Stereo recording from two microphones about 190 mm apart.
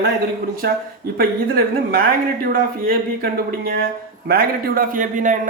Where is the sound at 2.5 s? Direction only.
50° right (ahead or behind).